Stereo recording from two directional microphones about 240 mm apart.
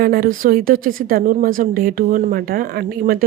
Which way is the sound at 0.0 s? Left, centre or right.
Right.